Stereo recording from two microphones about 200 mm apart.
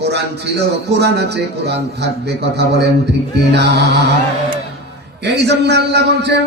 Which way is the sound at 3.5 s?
55° right (ahead or behind).